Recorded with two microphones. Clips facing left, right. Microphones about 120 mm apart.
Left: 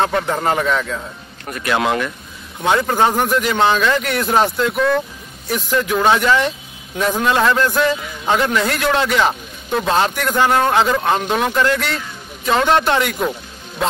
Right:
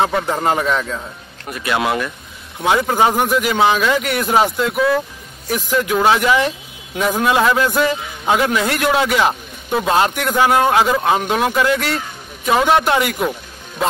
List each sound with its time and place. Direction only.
0.0 s a man's voice: 5° right (ahead or behind)